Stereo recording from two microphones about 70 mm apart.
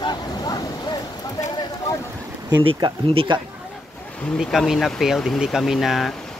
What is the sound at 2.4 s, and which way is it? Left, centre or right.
Speech, right.